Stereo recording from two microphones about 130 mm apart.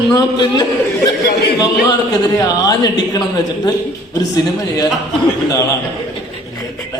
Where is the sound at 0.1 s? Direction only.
30° left (ahead or behind).